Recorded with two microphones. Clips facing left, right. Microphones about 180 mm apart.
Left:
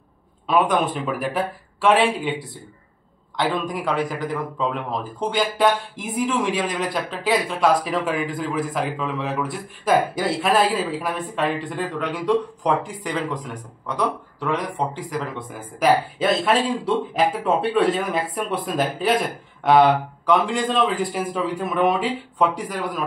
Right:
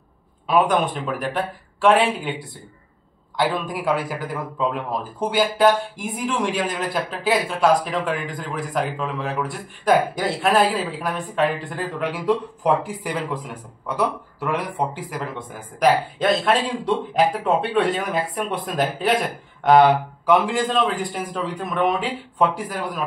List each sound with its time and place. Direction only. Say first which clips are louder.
0.5 s a man's voice: right 1 dB; centre (ahead or behind)